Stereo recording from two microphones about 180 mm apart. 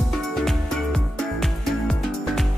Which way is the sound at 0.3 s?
Centre (ahead or behind).